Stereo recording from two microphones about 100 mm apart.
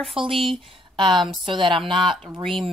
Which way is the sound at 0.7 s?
55° right (ahead or behind).